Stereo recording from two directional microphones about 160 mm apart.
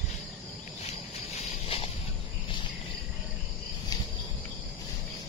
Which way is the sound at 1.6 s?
35° left (ahead or behind).